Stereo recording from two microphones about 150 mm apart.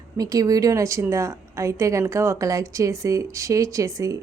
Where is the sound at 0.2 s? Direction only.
25° right (ahead or behind).